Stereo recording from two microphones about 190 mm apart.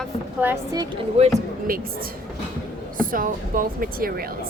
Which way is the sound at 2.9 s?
45° right (ahead or behind).